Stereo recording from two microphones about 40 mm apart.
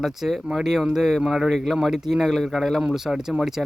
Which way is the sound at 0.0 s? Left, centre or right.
Centre.